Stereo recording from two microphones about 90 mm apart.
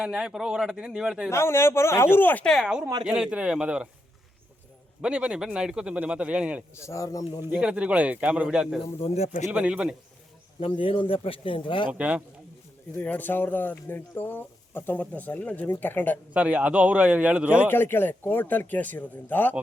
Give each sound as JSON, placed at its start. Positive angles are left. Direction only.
{"t": 0.0, "sound": "a man's voice", "side_deg": -10}
{"t": 1.3, "sound": "speech", "side_deg": 30}
{"t": 2.4, "sound": "speech", "side_deg": 5}
{"t": 3.1, "sound": "a man's voice", "side_deg": -10}
{"t": 5.0, "sound": "a man's voice", "side_deg": -10}
{"t": 6.7, "sound": "a man's voice", "side_deg": 35}
{"t": 7.6, "sound": "a man's voice", "side_deg": -15}
{"t": 10.6, "sound": "speech", "side_deg": 75}
{"t": 11.9, "sound": "a man's voice", "side_deg": -15}
{"t": 13.0, "sound": "speech", "side_deg": 20}
{"t": 16.3, "sound": "a man's voice", "side_deg": -15}
{"t": 17.7, "sound": "speech", "side_deg": 25}